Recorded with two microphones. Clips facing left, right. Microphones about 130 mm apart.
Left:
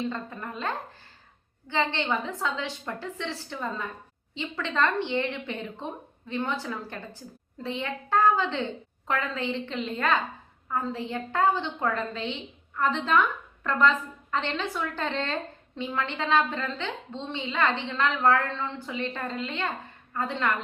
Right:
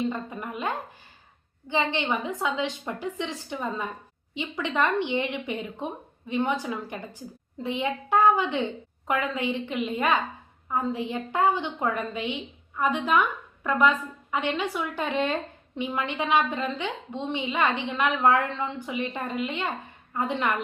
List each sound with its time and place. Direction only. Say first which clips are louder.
0.0 s a woman's voice: right 3 dB; 15° right (ahead or behind)